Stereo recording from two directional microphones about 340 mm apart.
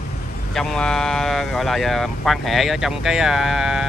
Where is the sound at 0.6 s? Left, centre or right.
Centre.